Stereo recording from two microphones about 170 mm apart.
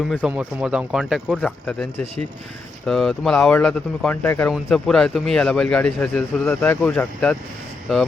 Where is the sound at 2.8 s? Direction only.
Centre (ahead or behind).